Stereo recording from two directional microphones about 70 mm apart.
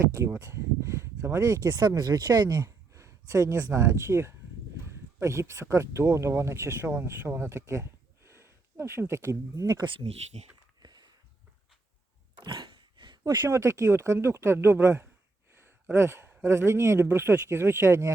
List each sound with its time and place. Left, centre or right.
0.3 s speech: right
2.0 s speech: right
2.6 s speech: right
10.8 s a sound: right
13.4 s speech: right
15.5 s a sound: right
16.4 s speech: right